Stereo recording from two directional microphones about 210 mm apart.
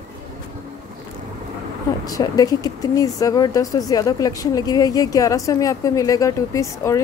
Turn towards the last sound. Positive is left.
turn(degrees=15)  # may be behind; listen again after turning